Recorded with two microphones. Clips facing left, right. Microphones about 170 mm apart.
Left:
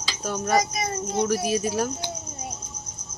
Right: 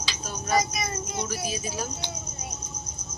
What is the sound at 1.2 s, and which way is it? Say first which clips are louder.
Cricket: left 11 dB; 65° left (ahead or behind).